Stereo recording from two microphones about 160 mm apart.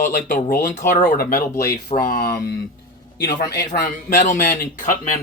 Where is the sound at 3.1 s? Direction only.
85° left.